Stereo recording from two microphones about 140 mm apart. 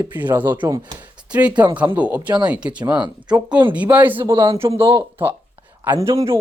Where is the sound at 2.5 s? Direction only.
10° right (ahead or behind).